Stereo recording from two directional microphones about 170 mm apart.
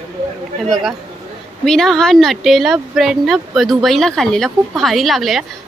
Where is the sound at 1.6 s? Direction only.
Centre (ahead or behind).